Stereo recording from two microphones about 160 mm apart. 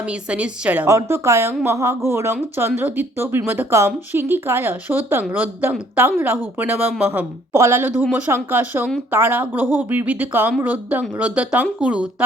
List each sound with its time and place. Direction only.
0.0 s speech: 5° right (ahead or behind)